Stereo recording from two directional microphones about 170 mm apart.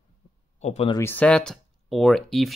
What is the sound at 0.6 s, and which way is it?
Speech, 40° left (ahead or behind).